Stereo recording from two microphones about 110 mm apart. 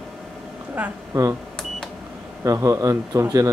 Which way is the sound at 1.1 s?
25° right (ahead or behind).